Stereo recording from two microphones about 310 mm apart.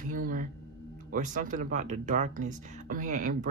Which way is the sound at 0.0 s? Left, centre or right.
Right.